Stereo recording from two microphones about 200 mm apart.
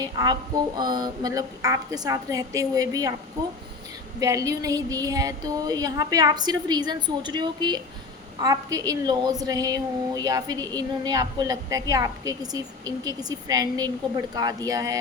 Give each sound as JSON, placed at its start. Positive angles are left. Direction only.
{"t": 0.0, "sound": "speech", "side_deg": -20}
{"t": 4.2, "sound": "a woman's voice", "side_deg": -15}